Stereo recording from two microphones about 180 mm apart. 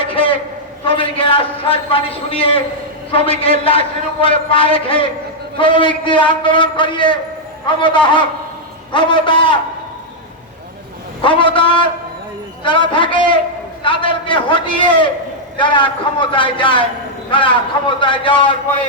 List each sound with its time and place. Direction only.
0.0 s a sound: 30° left (ahead or behind)
0.9 s a man's voice: 30° left (ahead or behind)
11.2 s a man's voice: 30° left (ahead or behind)